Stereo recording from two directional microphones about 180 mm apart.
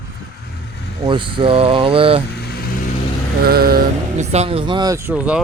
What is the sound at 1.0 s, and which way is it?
Speech, 25° right (ahead or behind).